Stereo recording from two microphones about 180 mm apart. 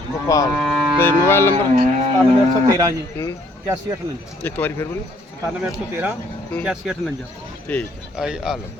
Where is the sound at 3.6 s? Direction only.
15° right (ahead or behind).